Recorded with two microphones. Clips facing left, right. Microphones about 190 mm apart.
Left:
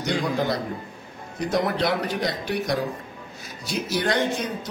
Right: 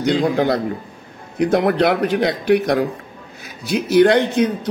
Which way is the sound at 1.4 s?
60° right (ahead or behind).